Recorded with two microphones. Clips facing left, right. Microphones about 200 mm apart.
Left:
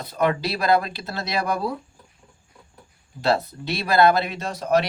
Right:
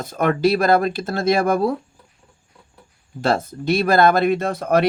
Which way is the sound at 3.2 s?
45° right (ahead or behind).